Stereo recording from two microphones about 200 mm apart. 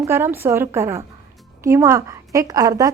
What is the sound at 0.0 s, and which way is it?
A woman's voice, 10° right (ahead or behind).